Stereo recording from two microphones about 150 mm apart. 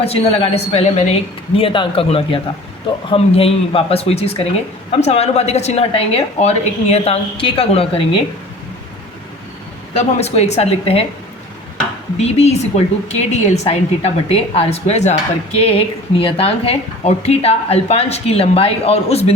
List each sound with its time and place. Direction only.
0.0 s a woman's voice: 40° left (ahead or behind)
9.9 s speech: 45° left (ahead or behind)
12.1 s a woman's voice: 45° left (ahead or behind)